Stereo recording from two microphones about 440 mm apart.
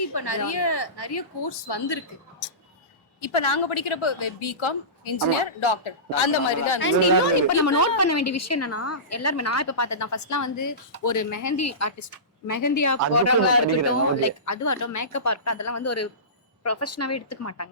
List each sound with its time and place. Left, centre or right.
0.0 s a woman's voice: left
3.2 s a woman's voice: left
7.3 s a woman's voice: left